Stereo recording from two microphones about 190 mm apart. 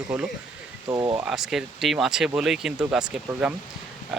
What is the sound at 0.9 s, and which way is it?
Speech, 20° right (ahead or behind).